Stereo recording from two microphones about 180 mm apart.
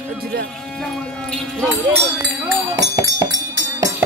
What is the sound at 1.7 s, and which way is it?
Music, 10° right (ahead or behind).